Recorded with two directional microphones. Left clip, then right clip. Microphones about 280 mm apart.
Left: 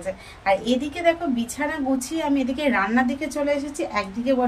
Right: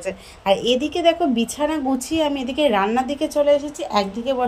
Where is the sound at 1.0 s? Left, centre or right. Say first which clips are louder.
Right 3 dB; right.